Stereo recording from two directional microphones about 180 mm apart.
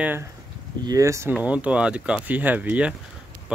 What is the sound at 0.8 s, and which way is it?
Speech, 20° right (ahead or behind).